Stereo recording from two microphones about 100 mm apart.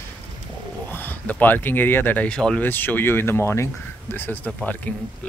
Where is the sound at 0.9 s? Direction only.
20° left (ahead or behind).